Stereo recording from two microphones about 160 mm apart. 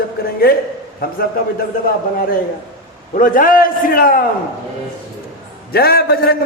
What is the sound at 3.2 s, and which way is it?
A man's voice, 60° left (ahead or behind).